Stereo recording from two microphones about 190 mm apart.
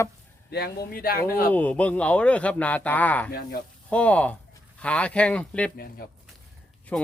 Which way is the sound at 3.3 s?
50° left (ahead or behind).